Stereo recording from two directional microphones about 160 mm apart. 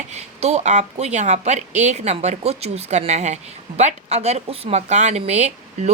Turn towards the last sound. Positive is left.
turn(degrees=-45)  # may be behind; listen again after turning